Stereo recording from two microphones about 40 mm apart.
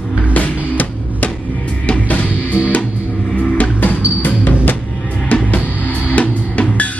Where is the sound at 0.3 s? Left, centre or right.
Left.